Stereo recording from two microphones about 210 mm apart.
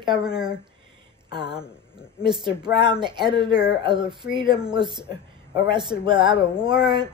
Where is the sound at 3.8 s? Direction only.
20° right (ahead or behind).